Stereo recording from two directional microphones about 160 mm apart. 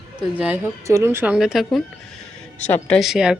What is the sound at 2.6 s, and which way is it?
Speech, 10° left (ahead or behind).